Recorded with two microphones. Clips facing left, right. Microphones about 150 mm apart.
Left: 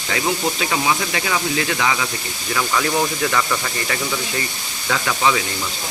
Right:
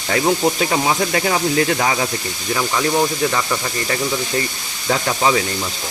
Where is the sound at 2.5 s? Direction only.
30° right (ahead or behind).